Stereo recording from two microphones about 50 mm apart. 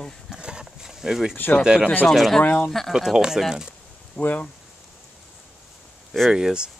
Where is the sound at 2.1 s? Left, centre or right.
Centre.